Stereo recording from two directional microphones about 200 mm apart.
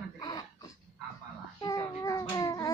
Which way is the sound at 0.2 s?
20° left (ahead or behind).